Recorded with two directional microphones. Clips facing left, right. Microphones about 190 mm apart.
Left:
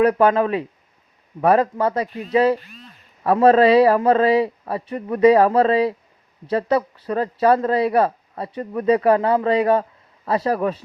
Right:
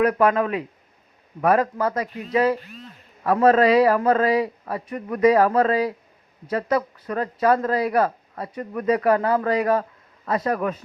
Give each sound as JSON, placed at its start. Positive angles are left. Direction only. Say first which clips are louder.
{"t": 0.0, "sound": "speech", "louder": "left 3 dB", "side_deg": 30}